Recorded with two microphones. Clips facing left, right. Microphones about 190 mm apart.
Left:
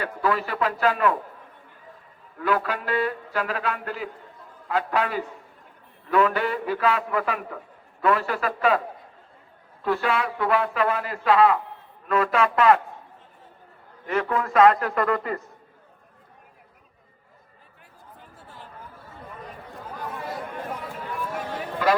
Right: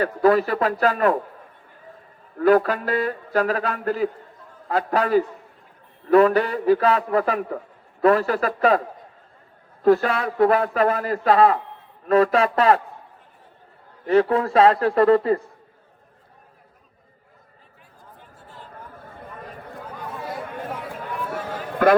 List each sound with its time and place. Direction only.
0.0 s a man's voice: 40° right (ahead or behind)
2.4 s a man's voice: 40° right (ahead or behind)
9.8 s a man's voice: 40° right (ahead or behind)
14.1 s a man's voice: 35° right (ahead or behind)
19.0 s chatter: 50° right (ahead or behind)
21.8 s a man's voice: 55° right (ahead or behind)